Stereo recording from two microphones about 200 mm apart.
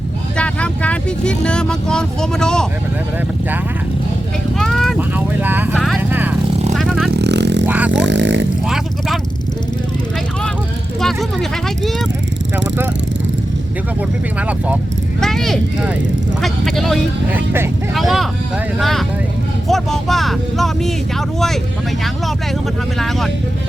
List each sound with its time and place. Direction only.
0.3 s speech: 5° left (ahead or behind)
4.5 s speech: centre (ahead or behind)
4.9 s vehicle: 10° right (ahead or behind)
7.1 s vehicle: 60° right (ahead or behind)
11.0 s speech: centre (ahead or behind)
15.2 s speech: centre (ahead or behind)
23.0 s speech: centre (ahead or behind)